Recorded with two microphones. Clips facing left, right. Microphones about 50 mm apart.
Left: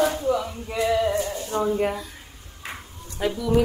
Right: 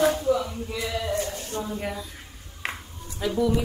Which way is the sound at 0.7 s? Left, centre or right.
Left.